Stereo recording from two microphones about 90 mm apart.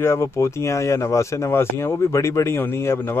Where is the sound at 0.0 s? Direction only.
30° left (ahead or behind).